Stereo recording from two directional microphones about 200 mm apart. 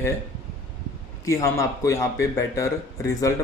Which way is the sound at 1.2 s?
15° left (ahead or behind).